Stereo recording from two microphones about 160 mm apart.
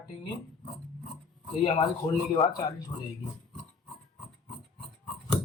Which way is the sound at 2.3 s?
25° left (ahead or behind).